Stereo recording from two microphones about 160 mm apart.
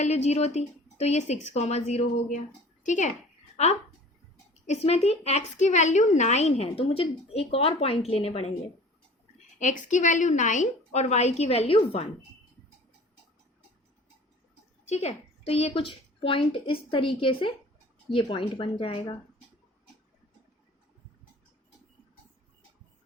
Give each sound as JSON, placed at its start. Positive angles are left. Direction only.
{"t": 0.0, "sound": "a woman's voice", "side_deg": 45}
{"t": 14.8, "sound": "a woman's voice", "side_deg": 45}